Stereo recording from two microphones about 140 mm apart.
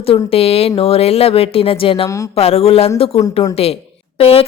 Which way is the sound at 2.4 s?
45° left (ahead or behind).